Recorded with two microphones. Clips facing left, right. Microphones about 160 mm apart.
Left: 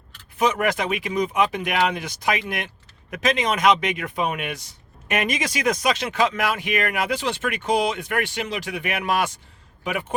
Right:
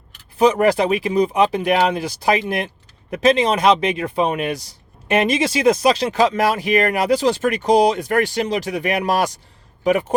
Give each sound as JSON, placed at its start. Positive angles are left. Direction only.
{"t": 0.3, "sound": "speech", "side_deg": -35}